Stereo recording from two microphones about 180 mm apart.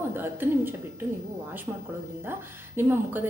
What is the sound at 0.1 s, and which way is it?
A woman's voice, 10° right (ahead or behind).